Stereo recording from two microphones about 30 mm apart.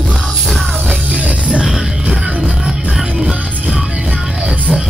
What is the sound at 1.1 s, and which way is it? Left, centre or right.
Music, right.